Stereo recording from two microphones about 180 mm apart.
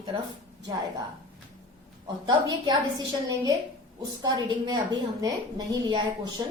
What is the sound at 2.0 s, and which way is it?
Speech, 25° right (ahead or behind).